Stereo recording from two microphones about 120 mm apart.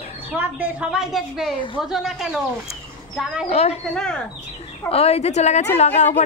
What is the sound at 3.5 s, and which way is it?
Speech, 60° left (ahead or behind).